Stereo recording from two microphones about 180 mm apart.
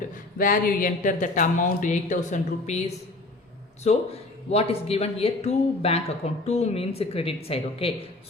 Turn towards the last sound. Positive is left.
turn(degrees=30)  # may be behind; listen again after turning